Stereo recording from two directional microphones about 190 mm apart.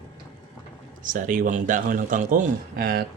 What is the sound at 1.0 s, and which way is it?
A man's voice, 45° right (ahead or behind).